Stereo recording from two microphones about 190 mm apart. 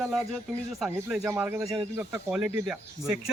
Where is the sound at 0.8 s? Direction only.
5° right (ahead or behind).